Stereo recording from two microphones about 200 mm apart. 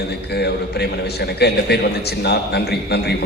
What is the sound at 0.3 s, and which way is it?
A man's voice, 55° left (ahead or behind).